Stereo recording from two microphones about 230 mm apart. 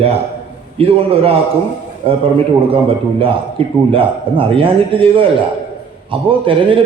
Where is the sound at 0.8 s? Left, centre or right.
Right.